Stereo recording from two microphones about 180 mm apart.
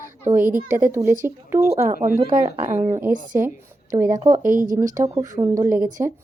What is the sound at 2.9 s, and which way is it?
Speech, 15° right (ahead or behind).